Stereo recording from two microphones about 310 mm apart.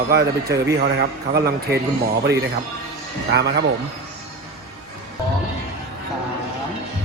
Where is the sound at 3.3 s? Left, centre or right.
Right.